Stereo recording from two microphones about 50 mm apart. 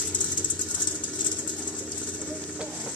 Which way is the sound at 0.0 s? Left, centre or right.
Left.